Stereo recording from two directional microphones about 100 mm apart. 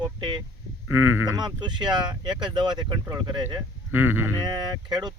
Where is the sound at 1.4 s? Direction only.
50° right (ahead or behind).